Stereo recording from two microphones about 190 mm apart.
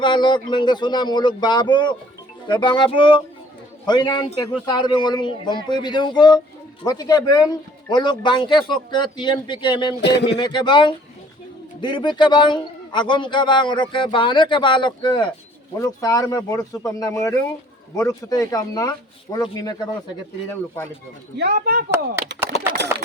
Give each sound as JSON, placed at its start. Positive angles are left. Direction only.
{"t": 0.0, "sound": "a man's voice", "side_deg": 25}
{"t": 10.0, "sound": "speech", "side_deg": 65}
{"t": 10.3, "sound": "a man's voice", "side_deg": 25}
{"t": 21.3, "sound": "speech", "side_deg": -55}